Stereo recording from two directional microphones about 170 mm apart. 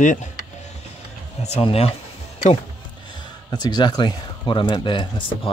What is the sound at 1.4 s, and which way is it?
Speech, 35° left (ahead or behind).